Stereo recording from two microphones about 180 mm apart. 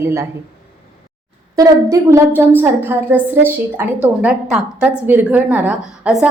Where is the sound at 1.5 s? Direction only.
15° right (ahead or behind).